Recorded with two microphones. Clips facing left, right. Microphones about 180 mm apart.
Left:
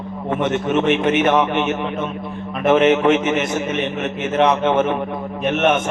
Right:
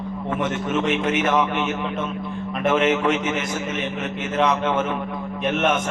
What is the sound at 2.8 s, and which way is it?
Speech, 25° left (ahead or behind).